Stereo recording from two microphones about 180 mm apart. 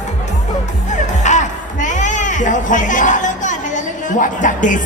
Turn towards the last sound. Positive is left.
turn(degrees=45)  # may be behind; listen again after turning